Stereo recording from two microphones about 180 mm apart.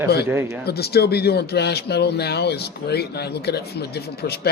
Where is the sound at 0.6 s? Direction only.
60° left (ahead or behind).